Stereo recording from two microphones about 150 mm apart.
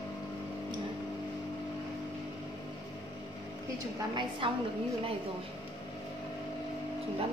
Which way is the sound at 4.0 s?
30° right (ahead or behind).